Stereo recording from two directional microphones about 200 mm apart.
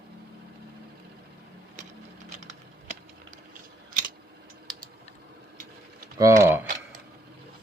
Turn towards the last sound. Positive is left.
turn(degrees=-15)  # may be behind; listen again after turning